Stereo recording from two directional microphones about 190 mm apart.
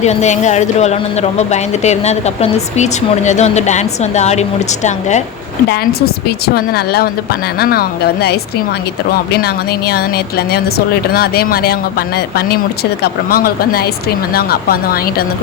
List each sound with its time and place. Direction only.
0.0 s speech: 35° left (ahead or behind)
6.2 s speech: 55° left (ahead or behind)
9.4 s a woman's voice: 55° left (ahead or behind)